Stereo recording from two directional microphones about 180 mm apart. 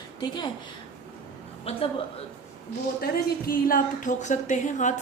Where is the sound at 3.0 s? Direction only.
55° left (ahead or behind).